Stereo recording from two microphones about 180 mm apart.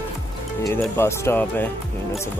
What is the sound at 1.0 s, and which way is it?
Speech, 15° left (ahead or behind).